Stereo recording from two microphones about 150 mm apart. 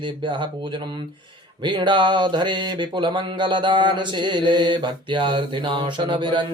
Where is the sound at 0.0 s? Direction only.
30° right (ahead or behind).